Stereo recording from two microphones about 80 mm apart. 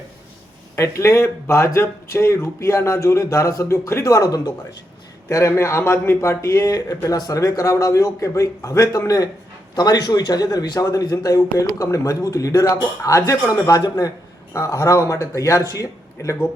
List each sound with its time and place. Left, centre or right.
0.8 s speech: left